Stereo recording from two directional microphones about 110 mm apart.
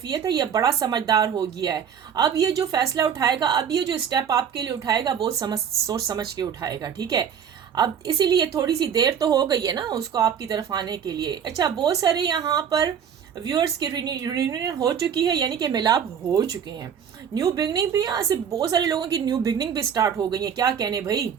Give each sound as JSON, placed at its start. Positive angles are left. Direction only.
{"t": 0.1, "sound": "speech", "side_deg": -35}